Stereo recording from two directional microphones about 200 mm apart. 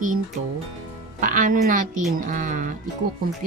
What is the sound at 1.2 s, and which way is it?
Speech, 40° right (ahead or behind).